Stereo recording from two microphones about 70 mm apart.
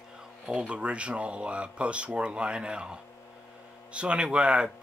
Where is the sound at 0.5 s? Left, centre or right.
Centre.